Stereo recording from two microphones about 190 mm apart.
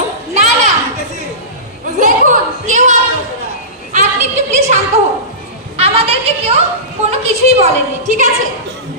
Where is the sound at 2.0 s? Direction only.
45° right (ahead or behind).